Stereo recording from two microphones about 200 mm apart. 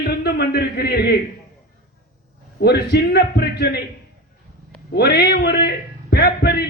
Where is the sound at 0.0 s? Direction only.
50° left (ahead or behind).